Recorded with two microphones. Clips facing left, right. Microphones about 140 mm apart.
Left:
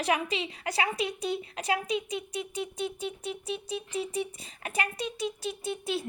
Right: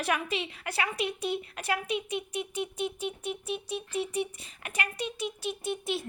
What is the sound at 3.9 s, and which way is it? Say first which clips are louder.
Speech: right 2 dB; 25° left (ahead or behind).